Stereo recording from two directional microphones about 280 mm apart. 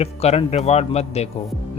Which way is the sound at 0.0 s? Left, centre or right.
Left.